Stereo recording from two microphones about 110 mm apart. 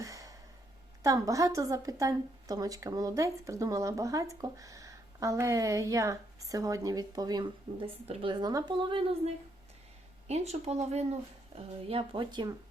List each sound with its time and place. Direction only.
0.0 s a sound: 30° right (ahead or behind)
1.0 s a woman's voice: 30° right (ahead or behind)
8.0 s a woman's voice: 65° right (ahead or behind)
8.3 s a woman's voice: 40° right (ahead or behind)
10.2 s speech: 80° right; by 12.5 s 45° right (ahead or behind)